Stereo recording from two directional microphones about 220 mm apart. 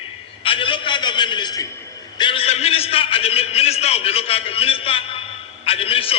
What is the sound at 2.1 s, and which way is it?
A man's voice, 25° left (ahead or behind).